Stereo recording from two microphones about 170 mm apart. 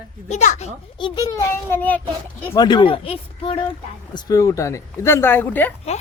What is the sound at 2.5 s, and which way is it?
Speech, 25° left (ahead or behind).